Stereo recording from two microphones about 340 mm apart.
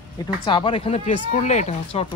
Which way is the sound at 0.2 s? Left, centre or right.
Centre.